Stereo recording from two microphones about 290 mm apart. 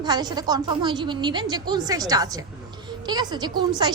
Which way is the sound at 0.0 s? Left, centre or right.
Centre.